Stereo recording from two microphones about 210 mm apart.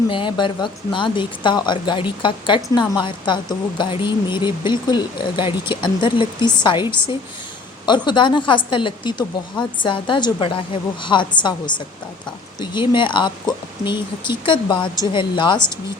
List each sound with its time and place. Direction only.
0.1 s speech: 25° left (ahead or behind)